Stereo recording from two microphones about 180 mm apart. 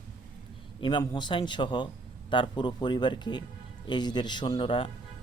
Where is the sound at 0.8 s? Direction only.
25° left (ahead or behind).